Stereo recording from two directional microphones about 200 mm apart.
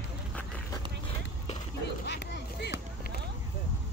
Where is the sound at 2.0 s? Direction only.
60° left (ahead or behind).